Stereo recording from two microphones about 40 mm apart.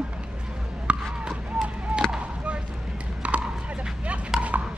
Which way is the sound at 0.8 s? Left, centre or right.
Right.